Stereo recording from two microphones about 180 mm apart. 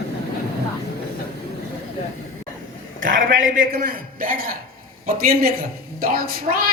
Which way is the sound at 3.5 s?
50° right (ahead or behind).